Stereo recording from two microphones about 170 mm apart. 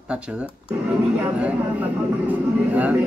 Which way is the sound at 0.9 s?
10° right (ahead or behind).